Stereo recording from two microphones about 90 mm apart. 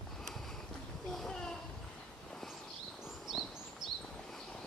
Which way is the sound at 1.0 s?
5° left (ahead or behind).